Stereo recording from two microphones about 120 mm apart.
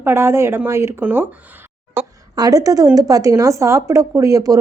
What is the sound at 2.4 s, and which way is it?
A woman's voice, 30° right (ahead or behind).